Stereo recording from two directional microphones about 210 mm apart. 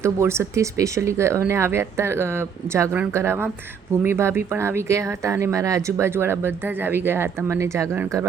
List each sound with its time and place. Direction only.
0.0 s speech: 15° right (ahead or behind)